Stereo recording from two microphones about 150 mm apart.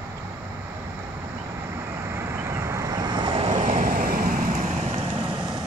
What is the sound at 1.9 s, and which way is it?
Vehicle, 20° right (ahead or behind).